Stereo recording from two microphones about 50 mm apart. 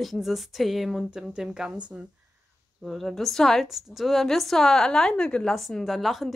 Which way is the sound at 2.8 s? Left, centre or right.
Centre.